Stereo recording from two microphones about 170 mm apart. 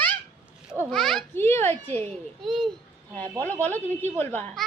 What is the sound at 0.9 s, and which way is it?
Speech, centre (ahead or behind).